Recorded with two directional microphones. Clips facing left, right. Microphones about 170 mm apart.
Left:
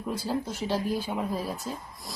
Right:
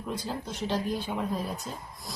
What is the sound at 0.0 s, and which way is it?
A woman's voice, 10° left (ahead or behind).